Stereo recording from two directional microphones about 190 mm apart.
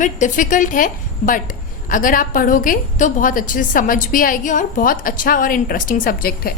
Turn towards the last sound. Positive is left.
turn(degrees=50)  # may be behind; listen again after turning